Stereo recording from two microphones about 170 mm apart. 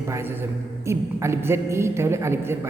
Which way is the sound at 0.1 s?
15° right (ahead or behind).